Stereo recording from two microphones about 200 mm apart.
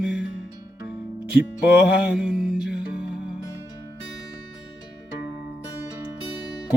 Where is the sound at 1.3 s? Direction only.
5° right (ahead or behind).